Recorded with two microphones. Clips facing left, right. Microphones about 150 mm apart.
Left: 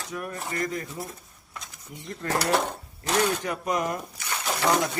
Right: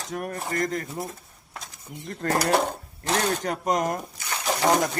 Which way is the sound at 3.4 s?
45° right (ahead or behind).